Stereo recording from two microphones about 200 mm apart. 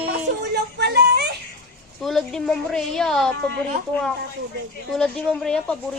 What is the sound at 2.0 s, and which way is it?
A woman's voice, centre (ahead or behind).